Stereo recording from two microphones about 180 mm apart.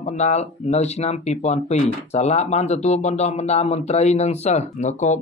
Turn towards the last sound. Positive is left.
turn(degrees=40)  # may be behind; listen again after turning